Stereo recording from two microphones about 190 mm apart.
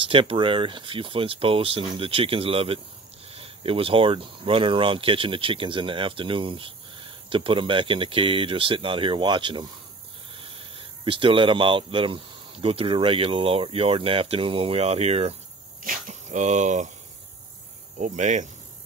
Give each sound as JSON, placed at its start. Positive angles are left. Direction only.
{"t": 0.0, "sound": "speech", "side_deg": -30}
{"t": 15.8, "sound": "speech", "side_deg": -45}
{"t": 17.9, "sound": "speech", "side_deg": -40}